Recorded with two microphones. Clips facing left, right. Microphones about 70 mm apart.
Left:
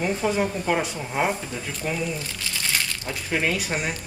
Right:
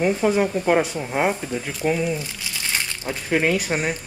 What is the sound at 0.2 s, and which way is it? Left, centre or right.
Speech, centre.